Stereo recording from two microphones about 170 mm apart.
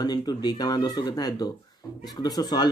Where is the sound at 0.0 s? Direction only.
25° left (ahead or behind).